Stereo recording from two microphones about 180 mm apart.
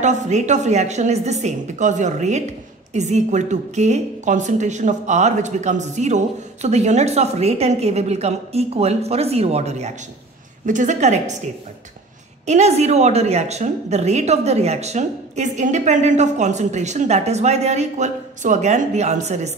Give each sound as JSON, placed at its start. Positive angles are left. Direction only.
{"t": 0.0, "sound": "a woman's voice", "side_deg": -40}
{"t": 12.4, "sound": "a woman's voice", "side_deg": -40}